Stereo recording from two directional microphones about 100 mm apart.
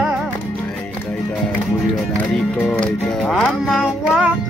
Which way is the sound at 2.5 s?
15° left (ahead or behind).